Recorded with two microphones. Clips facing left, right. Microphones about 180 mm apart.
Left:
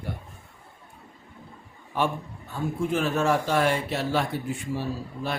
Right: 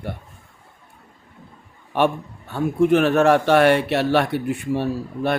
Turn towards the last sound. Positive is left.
turn(degrees=-65)  # may be behind; listen again after turning